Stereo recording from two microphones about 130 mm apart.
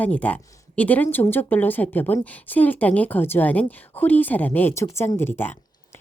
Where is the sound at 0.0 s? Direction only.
10° left (ahead or behind).